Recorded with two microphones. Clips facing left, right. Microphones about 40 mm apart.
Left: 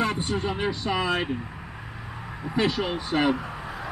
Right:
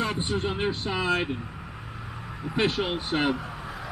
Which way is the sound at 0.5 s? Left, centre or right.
Left.